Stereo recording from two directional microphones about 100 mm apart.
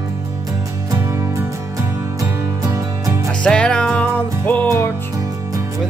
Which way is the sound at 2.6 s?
35° right (ahead or behind).